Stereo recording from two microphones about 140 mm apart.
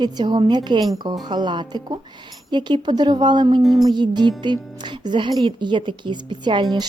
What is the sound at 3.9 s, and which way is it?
A woman's voice, 30° right (ahead or behind).